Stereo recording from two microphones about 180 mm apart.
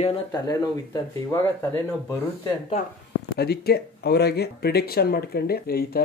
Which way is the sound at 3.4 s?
60° left (ahead or behind).